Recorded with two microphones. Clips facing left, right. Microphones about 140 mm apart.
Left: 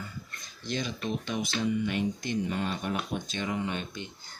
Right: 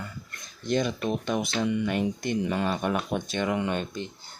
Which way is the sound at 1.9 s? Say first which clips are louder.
Right 3 dB; 55° right (ahead or behind).